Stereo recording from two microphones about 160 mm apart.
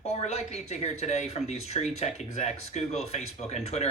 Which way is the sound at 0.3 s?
45° left (ahead or behind).